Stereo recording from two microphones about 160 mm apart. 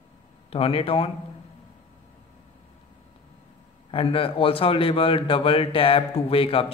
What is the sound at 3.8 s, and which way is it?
A man's voice, 35° left (ahead or behind).